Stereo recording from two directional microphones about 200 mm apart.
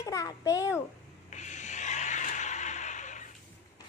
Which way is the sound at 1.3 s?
35° left (ahead or behind).